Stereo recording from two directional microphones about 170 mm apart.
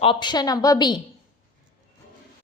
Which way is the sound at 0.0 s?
30° left (ahead or behind).